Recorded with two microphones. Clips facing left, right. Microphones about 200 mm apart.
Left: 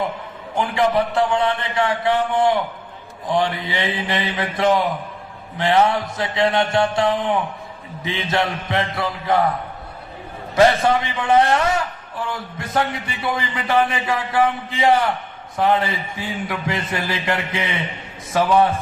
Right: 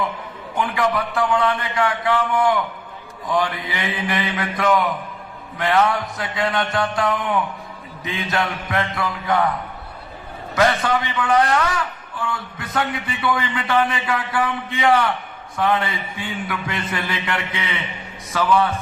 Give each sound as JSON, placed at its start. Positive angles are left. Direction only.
{"t": 0.5, "sound": "a man's voice", "side_deg": 30}
{"t": 10.5, "sound": "a man's voice", "side_deg": 30}